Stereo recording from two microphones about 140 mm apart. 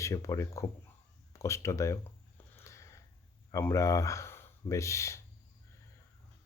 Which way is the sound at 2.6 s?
20° left (ahead or behind).